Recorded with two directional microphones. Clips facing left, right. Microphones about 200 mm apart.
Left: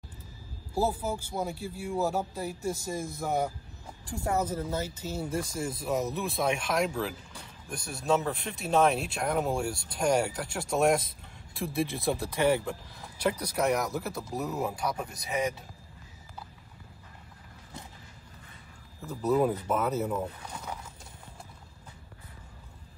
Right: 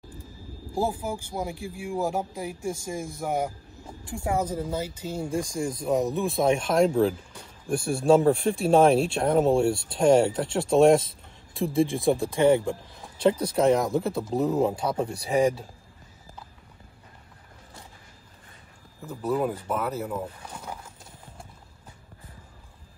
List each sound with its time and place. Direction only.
0.9 s speech: 10° right (ahead or behind)
5.4 s speech: 5° left (ahead or behind)
5.8 s speech: 20° right (ahead or behind)
19.7 s speech: 5° left (ahead or behind)
20.5 s a sound: 10° right (ahead or behind)